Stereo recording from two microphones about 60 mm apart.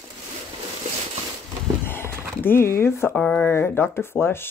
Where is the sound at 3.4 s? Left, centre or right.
Left.